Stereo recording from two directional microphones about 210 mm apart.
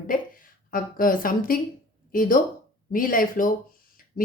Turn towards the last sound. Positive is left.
turn(degrees=40)  # may be behind; listen again after turning